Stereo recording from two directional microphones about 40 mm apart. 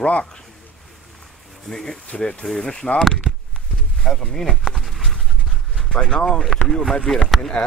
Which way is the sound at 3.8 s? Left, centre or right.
Centre.